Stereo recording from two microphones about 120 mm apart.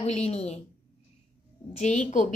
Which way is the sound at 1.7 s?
70° left (ahead or behind).